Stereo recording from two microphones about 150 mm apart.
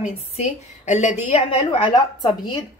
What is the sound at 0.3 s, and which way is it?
A woman's voice, 45° left (ahead or behind).